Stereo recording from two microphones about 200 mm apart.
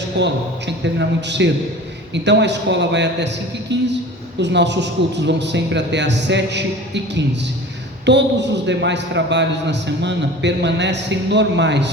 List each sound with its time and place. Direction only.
0.2 s a man's voice: 60° right (ahead or behind)